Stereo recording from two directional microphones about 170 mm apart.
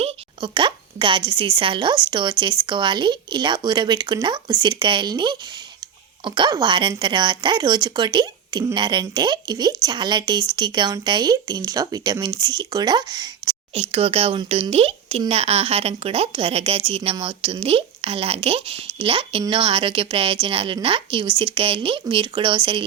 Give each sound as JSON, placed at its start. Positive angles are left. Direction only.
{"t": 0.0, "sound": "speech", "side_deg": -30}